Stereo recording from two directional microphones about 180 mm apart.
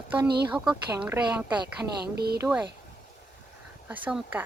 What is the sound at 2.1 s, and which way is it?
Speech, 60° right (ahead or behind).